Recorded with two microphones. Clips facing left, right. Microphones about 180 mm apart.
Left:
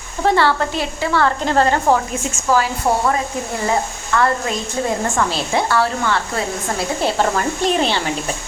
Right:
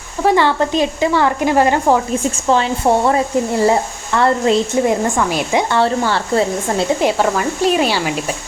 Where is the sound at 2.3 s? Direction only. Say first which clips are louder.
Left 1 dB; 25° right (ahead or behind).